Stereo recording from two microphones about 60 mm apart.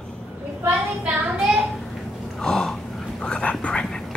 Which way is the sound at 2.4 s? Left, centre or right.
Centre.